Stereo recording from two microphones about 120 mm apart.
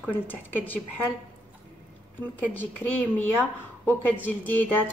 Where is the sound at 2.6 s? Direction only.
15° left (ahead or behind).